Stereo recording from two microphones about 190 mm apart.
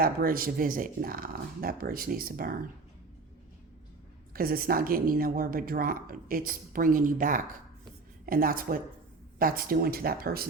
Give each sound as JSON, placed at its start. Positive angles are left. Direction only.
{"t": 0.0, "sound": "speech", "side_deg": -50}
{"t": 4.4, "sound": "speech", "side_deg": -50}